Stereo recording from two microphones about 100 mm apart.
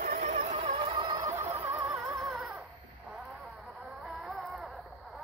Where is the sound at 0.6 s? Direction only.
65° right (ahead or behind).